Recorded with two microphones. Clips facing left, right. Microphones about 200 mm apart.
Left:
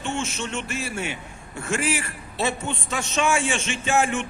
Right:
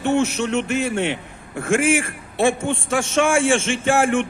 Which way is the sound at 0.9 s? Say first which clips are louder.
Right 8 dB; 70° right (ahead or behind).